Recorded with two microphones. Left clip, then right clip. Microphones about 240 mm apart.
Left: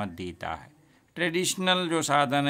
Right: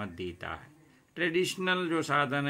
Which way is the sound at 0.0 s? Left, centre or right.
Left.